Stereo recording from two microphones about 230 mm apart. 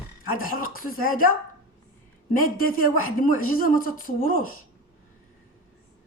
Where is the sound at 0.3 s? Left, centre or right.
Left.